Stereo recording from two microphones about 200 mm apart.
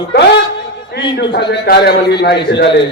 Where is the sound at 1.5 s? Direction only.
55° left (ahead or behind).